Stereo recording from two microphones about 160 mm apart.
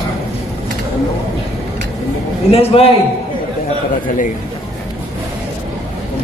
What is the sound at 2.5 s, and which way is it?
Speech, 35° left (ahead or behind).